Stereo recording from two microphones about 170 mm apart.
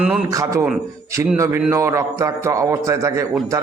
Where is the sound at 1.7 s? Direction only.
20° right (ahead or behind).